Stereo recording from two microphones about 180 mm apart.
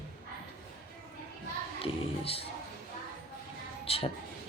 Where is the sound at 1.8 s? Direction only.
30° left (ahead or behind).